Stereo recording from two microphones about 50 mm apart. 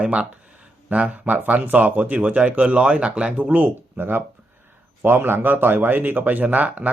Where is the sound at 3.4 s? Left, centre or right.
Right.